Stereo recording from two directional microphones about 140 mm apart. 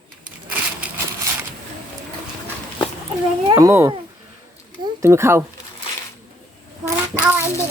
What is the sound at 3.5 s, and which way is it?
Speech, 20° right (ahead or behind).